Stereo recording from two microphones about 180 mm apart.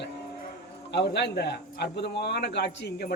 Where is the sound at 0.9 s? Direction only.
70° left (ahead or behind).